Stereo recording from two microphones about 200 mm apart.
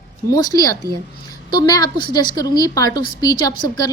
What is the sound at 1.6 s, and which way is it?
A woman's voice, 20° left (ahead or behind).